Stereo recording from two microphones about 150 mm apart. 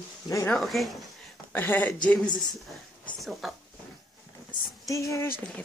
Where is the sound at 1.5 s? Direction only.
10° left (ahead or behind).